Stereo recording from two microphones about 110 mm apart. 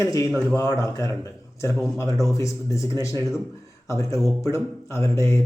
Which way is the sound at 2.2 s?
30° left (ahead or behind).